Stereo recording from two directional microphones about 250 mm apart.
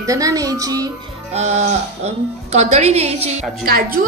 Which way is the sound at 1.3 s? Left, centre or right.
Right.